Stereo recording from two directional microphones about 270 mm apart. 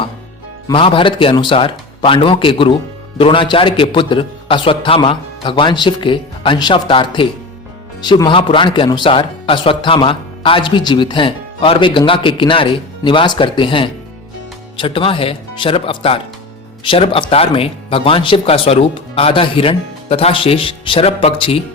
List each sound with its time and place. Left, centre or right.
0.7 s a man's voice: centre